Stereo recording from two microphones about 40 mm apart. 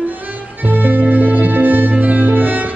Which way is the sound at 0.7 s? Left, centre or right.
Right.